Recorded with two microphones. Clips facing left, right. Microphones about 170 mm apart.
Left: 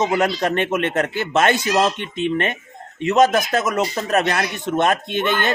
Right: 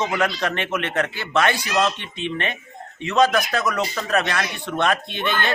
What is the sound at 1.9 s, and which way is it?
Speech, 50° left (ahead or behind).